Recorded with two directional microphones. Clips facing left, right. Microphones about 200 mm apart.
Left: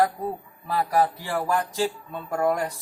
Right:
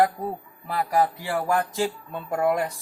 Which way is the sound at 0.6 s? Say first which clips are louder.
Even; 15° right (ahead or behind).